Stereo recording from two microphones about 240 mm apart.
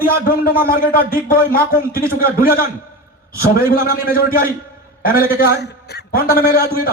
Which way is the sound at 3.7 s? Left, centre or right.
Left.